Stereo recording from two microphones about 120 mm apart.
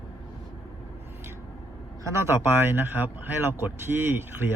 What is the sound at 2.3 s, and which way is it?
Speech, 15° right (ahead or behind).